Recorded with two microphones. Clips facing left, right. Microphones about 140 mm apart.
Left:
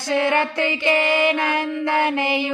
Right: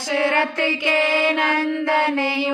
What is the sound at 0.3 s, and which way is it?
Mantra, 15° left (ahead or behind).